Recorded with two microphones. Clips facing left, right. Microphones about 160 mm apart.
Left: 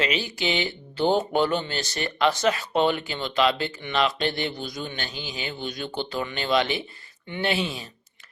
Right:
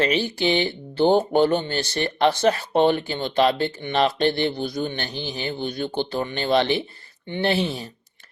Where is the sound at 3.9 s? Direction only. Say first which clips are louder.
Right 3 dB; 55° right (ahead or behind).